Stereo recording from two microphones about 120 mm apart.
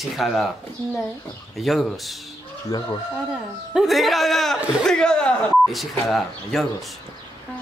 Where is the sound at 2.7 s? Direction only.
30° left (ahead or behind).